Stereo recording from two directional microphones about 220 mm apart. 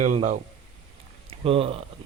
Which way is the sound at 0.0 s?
35° right (ahead or behind).